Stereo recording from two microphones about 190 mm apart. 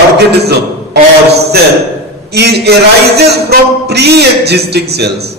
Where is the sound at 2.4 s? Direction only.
60° right (ahead or behind).